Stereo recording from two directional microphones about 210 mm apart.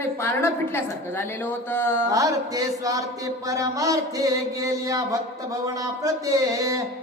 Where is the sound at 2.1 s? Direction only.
15° right (ahead or behind).